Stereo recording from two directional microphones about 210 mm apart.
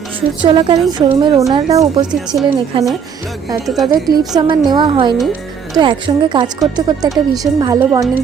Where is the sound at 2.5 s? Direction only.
15° right (ahead or behind).